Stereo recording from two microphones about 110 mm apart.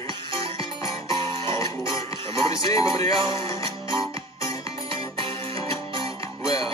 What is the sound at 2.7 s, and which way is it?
Music, 30° left (ahead or behind).